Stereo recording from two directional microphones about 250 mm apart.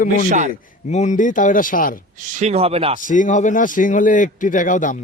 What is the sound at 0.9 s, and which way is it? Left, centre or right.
Speech, left.